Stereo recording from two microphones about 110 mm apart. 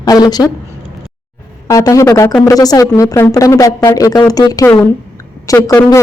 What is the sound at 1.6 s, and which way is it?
Speech, 30° left (ahead or behind).